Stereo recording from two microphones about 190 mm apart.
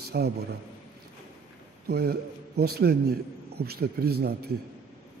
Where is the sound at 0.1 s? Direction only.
55° right (ahead or behind).